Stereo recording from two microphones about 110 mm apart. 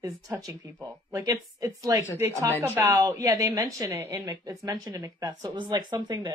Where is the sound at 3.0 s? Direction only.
30° right (ahead or behind).